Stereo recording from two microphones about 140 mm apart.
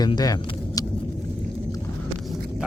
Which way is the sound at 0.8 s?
25° left (ahead or behind).